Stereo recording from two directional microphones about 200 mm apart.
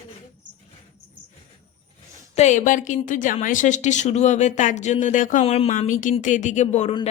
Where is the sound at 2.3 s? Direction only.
35° left (ahead or behind).